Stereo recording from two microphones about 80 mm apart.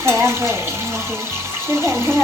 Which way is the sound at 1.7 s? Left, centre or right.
Right.